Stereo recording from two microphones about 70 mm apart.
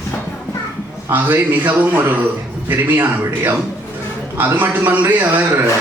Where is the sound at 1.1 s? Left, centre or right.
Right.